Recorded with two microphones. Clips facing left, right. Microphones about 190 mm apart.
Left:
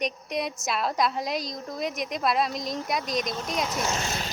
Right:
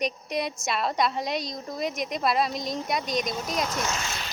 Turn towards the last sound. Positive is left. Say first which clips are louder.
# left 3 dB
turn(degrees=40)  # may be behind; listen again after turning